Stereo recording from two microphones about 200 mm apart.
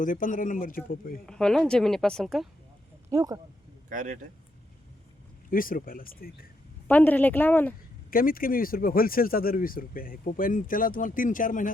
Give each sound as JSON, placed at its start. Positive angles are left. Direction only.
{"t": 0.0, "sound": "speech", "side_deg": 40}
{"t": 1.3, "sound": "speech", "side_deg": 5}
{"t": 3.1, "sound": "speech", "side_deg": -15}
{"t": 3.8, "sound": "a man's voice", "side_deg": -40}
{"t": 5.5, "sound": "speech", "side_deg": 45}
{"t": 6.8, "sound": "a woman's voice", "side_deg": 10}
{"t": 8.1, "sound": "speech", "side_deg": 45}